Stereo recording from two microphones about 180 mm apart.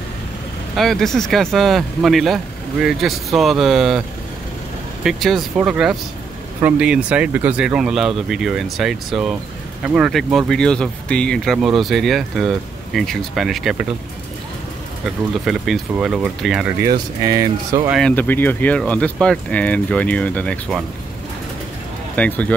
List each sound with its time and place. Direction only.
0.7 s speech: centre (ahead or behind)
5.0 s speech: centre (ahead or behind)
15.0 s speech: centre (ahead or behind)
17.4 s speech: 20° right (ahead or behind)
17.9 s speech: 5° left (ahead or behind)
22.1 s speech: 10° left (ahead or behind)